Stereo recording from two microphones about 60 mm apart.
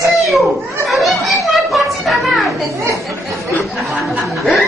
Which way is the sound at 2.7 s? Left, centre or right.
Right.